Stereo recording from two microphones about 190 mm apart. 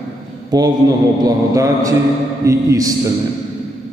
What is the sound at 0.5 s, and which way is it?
Speech, 20° right (ahead or behind).